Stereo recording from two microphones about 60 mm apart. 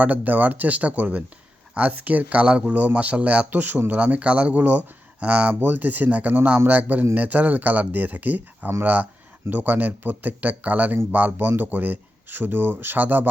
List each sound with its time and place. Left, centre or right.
0.0 s speech: right